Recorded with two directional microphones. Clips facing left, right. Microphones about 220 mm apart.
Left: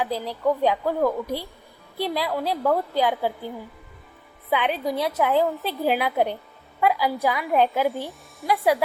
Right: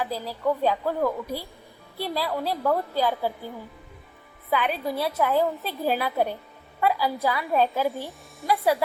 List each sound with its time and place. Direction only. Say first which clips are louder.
0.0 s a woman's voice: left 3 dB; 20° left (ahead or behind)
4.5 s a woman's voice: left 2 dB; 20° left (ahead or behind)